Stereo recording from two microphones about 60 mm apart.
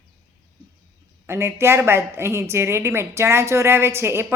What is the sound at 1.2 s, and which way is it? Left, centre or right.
A woman's voice, right.